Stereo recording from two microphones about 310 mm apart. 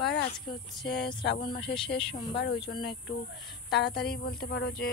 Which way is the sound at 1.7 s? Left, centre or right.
Centre.